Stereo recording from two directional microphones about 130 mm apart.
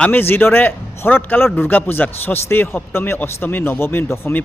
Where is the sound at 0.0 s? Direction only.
15° left (ahead or behind).